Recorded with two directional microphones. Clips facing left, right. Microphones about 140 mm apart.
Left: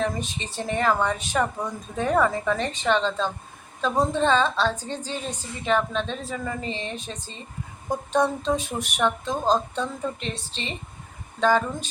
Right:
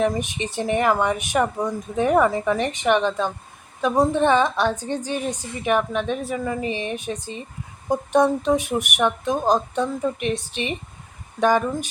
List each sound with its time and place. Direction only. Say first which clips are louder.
0.0 s a woman's voice: right 5 dB; 15° right (ahead or behind)